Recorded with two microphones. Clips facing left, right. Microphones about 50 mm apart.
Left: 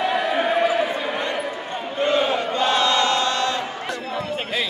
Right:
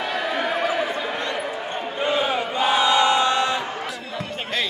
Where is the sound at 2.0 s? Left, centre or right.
Centre.